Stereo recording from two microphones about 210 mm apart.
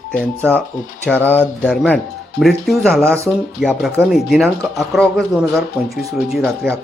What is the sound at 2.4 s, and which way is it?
Speech, centre (ahead or behind).